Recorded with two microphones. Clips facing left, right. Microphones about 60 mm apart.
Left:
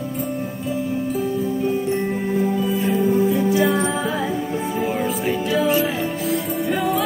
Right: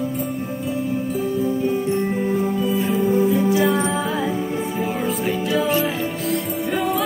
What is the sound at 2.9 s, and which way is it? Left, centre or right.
Music, centre.